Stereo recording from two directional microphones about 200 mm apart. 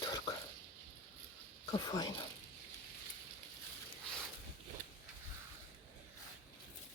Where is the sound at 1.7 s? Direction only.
20° left (ahead or behind).